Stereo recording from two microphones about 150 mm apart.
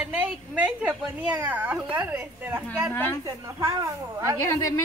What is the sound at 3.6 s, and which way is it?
Speech, 20° right (ahead or behind).